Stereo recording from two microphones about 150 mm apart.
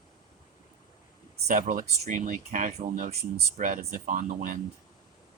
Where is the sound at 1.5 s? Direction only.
65° right (ahead or behind).